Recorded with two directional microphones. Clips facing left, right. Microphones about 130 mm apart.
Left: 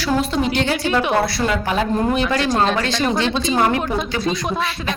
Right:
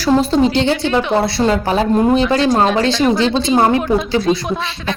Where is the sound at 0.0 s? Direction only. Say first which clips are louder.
Right 6 dB; 30° right (ahead or behind).